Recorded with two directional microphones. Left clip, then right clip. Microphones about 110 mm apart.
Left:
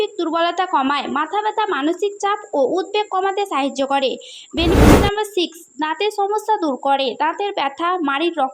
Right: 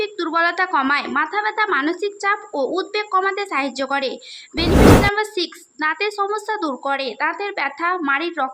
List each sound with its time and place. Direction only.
0.0 s a woman's voice: 35° left (ahead or behind)
5.1 s a woman's voice: 55° left (ahead or behind)